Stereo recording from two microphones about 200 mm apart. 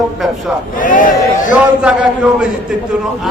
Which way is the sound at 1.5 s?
5° right (ahead or behind).